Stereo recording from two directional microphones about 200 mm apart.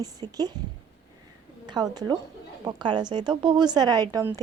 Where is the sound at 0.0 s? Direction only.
20° right (ahead or behind).